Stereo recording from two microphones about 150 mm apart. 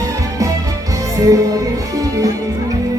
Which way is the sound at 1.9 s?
25° right (ahead or behind).